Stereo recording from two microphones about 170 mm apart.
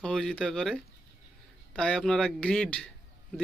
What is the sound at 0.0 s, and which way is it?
Speech, 5° left (ahead or behind).